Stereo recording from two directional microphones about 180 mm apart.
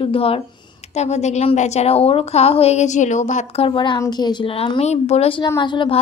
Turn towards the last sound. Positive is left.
turn(degrees=25)  # may be behind; listen again after turning